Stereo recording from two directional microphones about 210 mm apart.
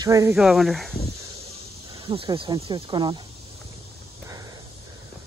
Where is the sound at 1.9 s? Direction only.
25° right (ahead or behind).